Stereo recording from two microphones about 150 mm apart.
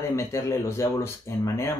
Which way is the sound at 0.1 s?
20° left (ahead or behind).